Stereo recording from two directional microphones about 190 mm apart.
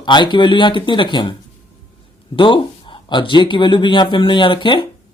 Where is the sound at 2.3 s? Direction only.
25° left (ahead or behind).